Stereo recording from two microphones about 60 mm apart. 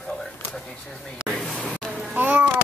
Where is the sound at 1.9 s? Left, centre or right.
Centre.